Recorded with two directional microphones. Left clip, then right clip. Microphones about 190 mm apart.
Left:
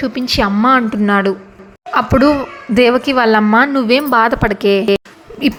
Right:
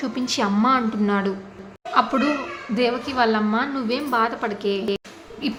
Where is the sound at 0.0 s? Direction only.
20° left (ahead or behind).